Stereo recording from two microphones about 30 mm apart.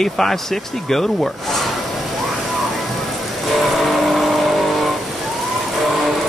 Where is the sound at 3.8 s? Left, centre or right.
Centre.